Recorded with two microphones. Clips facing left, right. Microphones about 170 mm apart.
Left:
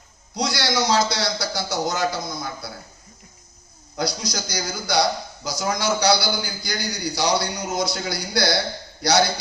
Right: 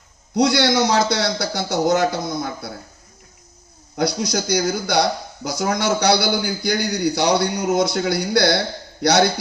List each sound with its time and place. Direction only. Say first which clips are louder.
0.3 s speech: right 7 dB; 55° right (ahead or behind)
3.9 s speech: right 6 dB; 55° right (ahead or behind)